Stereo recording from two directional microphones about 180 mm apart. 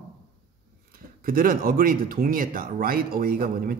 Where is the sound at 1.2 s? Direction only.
50° right (ahead or behind).